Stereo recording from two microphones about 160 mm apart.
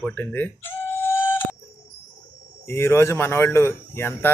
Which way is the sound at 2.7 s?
15° left (ahead or behind).